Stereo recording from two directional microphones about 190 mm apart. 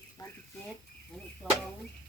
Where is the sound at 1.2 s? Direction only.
5° left (ahead or behind).